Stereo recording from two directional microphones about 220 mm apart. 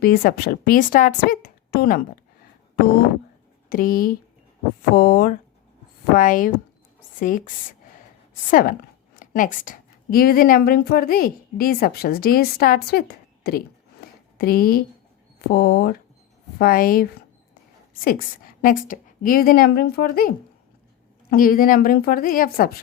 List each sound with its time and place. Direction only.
0.0 s a woman's voice: 40° left (ahead or behind)
3.7 s a woman's voice: 40° left (ahead or behind)